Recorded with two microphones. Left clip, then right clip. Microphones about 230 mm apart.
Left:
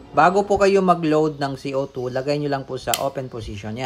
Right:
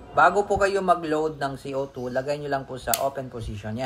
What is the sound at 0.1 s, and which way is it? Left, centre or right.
A man's voice, left.